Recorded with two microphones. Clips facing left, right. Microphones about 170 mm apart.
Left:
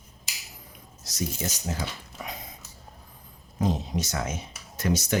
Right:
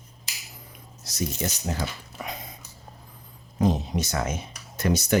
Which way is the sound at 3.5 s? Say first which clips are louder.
Right 3 dB; 60° right (ahead or behind).